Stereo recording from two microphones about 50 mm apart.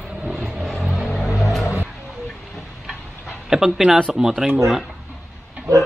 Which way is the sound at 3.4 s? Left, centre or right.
Centre.